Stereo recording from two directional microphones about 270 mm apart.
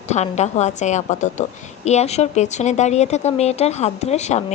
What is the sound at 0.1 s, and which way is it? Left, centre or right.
A woman's voice, left.